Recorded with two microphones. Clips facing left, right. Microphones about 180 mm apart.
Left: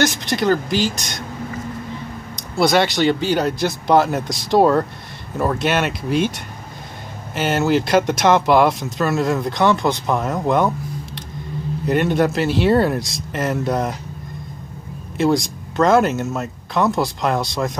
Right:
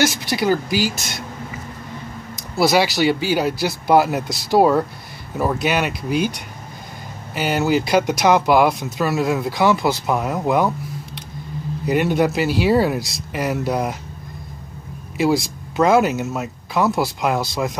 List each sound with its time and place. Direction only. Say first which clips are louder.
0.0 s speech: left 1 dB; 5° right (ahead or behind)
2.5 s speech: even; 5° right (ahead or behind)
11.8 s speech: even; 5° right (ahead or behind)
15.1 s speech: left 1 dB; 5° right (ahead or behind)